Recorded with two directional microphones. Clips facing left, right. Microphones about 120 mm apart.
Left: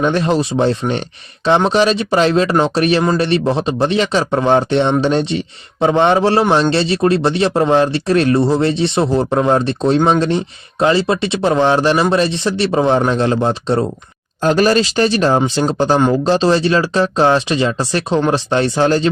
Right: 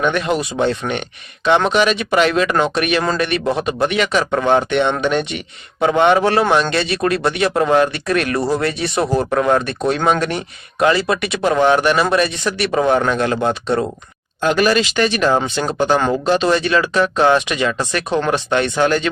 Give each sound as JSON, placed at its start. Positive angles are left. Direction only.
{"t": 0.0, "sound": "a man's voice", "side_deg": 30}